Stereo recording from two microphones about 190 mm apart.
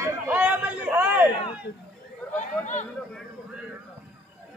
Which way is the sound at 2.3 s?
40° left (ahead or behind).